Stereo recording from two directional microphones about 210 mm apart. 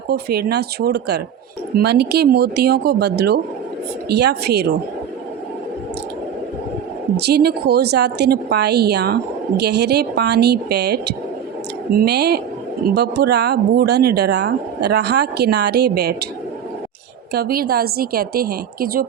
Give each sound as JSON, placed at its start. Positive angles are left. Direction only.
{"t": 0.1, "sound": "speech", "side_deg": -50}
{"t": 7.2, "sound": "speech", "side_deg": -50}
{"t": 17.3, "sound": "speech", "side_deg": -45}